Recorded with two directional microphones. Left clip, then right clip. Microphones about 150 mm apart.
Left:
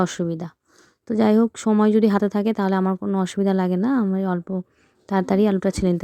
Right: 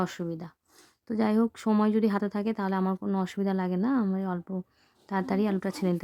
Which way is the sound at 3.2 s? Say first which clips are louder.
Left 8 dB; 30° left (ahead or behind).